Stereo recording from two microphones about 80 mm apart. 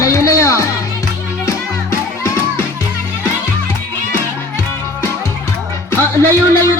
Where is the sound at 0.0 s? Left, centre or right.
Left.